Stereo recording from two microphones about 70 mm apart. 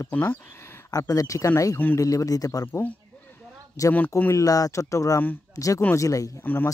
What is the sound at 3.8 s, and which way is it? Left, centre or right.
Speech, left.